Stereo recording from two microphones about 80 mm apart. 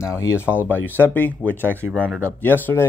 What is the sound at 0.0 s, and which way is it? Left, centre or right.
Speech, left.